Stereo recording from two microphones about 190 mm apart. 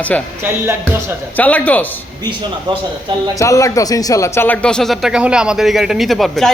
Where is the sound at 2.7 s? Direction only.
25° right (ahead or behind).